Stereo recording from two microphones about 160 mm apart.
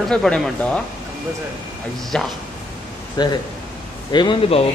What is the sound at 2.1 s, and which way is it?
Speech, 5° left (ahead or behind).